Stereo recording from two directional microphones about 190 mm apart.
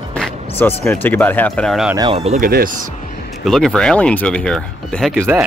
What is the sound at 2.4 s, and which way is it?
Speech, 50° right (ahead or behind).